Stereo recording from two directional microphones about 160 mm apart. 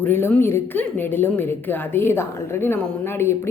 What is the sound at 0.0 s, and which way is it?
Speech, 15° left (ahead or behind).